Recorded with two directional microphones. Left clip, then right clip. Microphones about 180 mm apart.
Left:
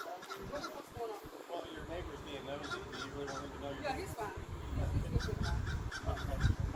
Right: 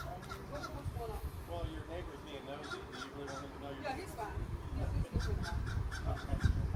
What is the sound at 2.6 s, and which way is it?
Crow, 60° right (ahead or behind).